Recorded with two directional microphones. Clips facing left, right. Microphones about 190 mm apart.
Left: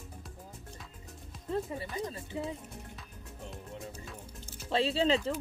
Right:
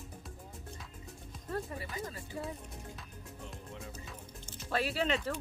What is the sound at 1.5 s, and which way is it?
Music, 20° left (ahead or behind).